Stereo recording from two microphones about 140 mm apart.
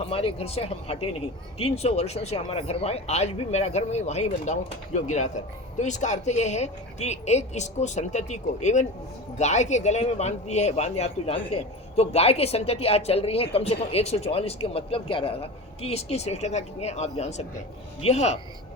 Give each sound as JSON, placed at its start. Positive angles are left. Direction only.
{"t": 0.0, "sound": "a man's voice", "side_deg": 40}